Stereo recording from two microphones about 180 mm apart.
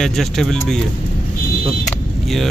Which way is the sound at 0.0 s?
Centre (ahead or behind).